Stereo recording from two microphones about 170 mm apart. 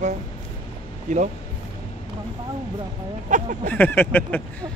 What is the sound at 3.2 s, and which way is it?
Speech, 50° right (ahead or behind).